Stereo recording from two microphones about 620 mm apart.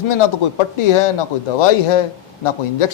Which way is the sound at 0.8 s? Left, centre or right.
Left.